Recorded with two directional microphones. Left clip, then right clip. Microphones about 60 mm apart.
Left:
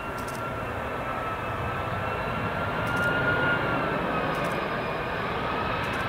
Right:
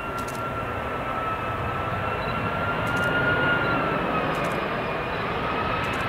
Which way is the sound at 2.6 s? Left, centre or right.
Left.